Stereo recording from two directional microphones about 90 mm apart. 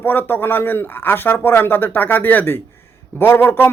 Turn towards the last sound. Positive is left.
turn(degrees=25)  # may be behind; listen again after turning